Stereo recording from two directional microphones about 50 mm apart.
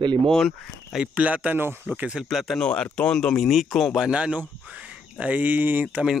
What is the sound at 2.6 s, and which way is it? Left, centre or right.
Speech, centre.